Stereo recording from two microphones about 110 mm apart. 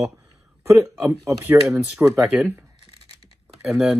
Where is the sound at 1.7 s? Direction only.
5° right (ahead or behind).